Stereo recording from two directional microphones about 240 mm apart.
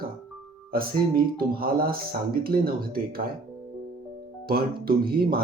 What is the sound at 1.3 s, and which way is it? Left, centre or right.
Speech, right.